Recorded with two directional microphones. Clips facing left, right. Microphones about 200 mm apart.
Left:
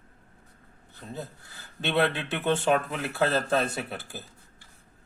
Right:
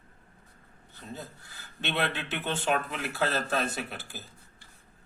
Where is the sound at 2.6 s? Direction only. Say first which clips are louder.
Left 4 dB; 25° left (ahead or behind).